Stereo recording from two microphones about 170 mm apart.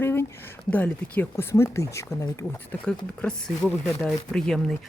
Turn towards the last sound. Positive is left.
turn(degrees=5)  # may be behind; listen again after turning